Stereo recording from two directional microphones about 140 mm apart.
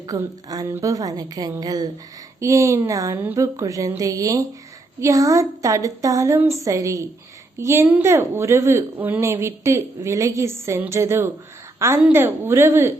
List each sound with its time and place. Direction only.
0.1 s a woman's voice: 25° right (ahead or behind)